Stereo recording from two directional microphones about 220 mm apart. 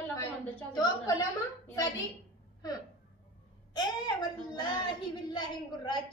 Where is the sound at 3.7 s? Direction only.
20° left (ahead or behind).